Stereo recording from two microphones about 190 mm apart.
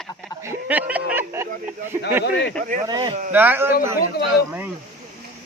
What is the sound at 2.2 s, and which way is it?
Speech, 65° left (ahead or behind).